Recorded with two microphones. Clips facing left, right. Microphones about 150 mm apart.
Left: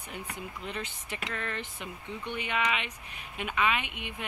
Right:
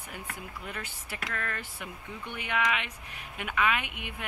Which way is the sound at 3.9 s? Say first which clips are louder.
Left 1 dB; 15° right (ahead or behind).